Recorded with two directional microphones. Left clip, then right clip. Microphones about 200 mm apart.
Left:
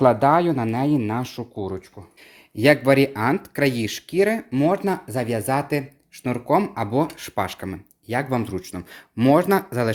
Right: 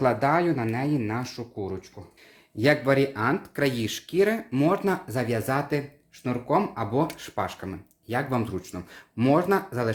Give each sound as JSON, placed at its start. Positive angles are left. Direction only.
{"t": 0.0, "sound": "speech", "side_deg": 35}